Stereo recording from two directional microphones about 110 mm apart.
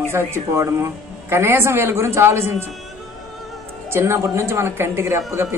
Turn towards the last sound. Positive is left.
turn(degrees=-25)  # may be behind; listen again after turning